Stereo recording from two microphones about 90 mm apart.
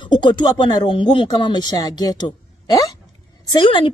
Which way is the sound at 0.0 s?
60° left (ahead or behind).